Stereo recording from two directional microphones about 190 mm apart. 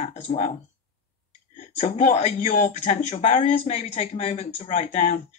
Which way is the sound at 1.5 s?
40° left (ahead or behind).